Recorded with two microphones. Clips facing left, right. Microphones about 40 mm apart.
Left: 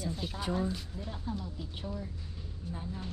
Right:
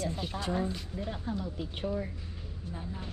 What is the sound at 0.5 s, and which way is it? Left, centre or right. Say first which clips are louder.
Speech: even; right.